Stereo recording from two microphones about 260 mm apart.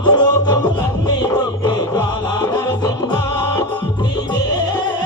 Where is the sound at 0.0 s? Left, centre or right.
Centre.